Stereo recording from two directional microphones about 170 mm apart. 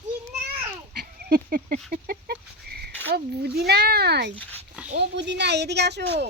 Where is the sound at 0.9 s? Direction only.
65° right (ahead or behind).